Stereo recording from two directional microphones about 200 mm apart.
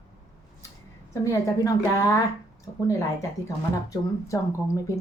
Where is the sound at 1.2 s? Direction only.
15° left (ahead or behind).